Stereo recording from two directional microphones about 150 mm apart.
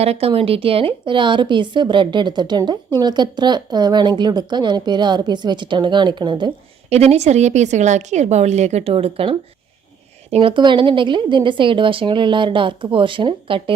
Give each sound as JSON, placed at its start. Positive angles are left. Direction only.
{"t": 0.0, "sound": "a woman's voice", "side_deg": -40}
{"t": 6.9, "sound": "a woman's voice", "side_deg": -45}